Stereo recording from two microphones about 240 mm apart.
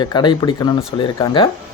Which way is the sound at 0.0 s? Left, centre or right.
Centre.